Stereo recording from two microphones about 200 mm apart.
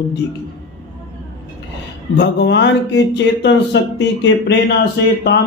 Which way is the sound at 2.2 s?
60° left (ahead or behind).